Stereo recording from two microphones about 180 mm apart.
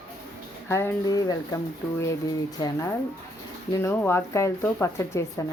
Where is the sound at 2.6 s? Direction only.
20° left (ahead or behind).